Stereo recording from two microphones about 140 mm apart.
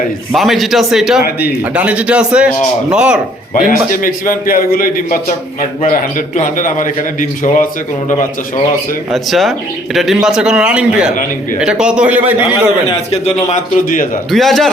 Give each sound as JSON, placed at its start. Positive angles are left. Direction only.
{"t": 0.3, "sound": "a man's voice", "side_deg": 0}
{"t": 3.5, "sound": "a man's voice", "side_deg": 75}
{"t": 5.8, "sound": "a man's voice", "side_deg": 65}
{"t": 9.1, "sound": "a man's voice", "side_deg": 0}
{"t": 13.5, "sound": "a man's voice", "side_deg": 75}
{"t": 14.3, "sound": "speech", "side_deg": 0}